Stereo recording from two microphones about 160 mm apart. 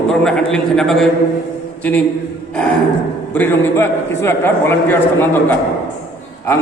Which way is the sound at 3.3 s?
15° left (ahead or behind).